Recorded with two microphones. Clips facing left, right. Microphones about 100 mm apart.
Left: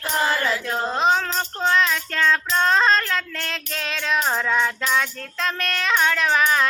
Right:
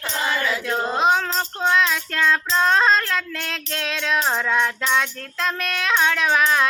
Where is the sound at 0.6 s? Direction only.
5° right (ahead or behind).